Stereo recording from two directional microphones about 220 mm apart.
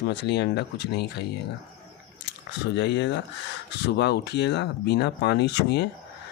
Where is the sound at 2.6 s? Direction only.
50° left (ahead or behind).